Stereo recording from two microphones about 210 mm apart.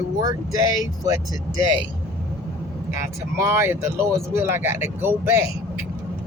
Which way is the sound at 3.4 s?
10° right (ahead or behind).